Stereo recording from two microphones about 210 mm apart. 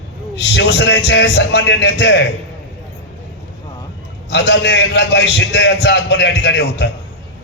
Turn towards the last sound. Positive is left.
turn(degrees=55)  # may be behind; listen again after turning